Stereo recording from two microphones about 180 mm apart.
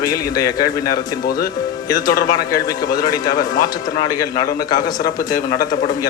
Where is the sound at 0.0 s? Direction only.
20° left (ahead or behind).